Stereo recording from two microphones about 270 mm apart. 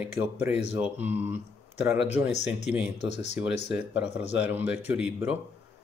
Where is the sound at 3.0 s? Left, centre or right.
Left.